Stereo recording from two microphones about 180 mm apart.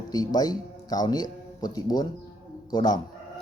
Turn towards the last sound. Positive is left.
turn(degrees=20)  # may be behind; listen again after turning